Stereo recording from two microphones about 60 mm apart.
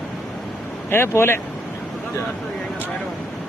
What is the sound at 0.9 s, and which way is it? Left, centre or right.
Speech, left.